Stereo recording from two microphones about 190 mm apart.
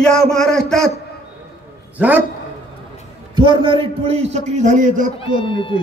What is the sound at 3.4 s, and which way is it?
A man's voice, 25° right (ahead or behind).